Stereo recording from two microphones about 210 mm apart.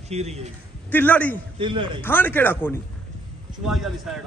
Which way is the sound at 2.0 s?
10° left (ahead or behind).